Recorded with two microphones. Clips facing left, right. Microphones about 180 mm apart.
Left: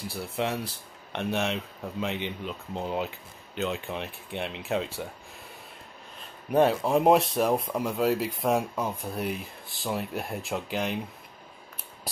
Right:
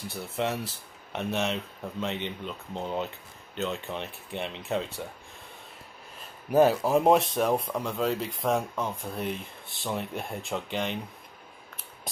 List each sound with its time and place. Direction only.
0.1 s speech: centre (ahead or behind)
6.5 s speech: 5° right (ahead or behind)